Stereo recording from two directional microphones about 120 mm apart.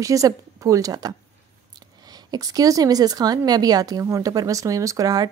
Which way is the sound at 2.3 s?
30° right (ahead or behind).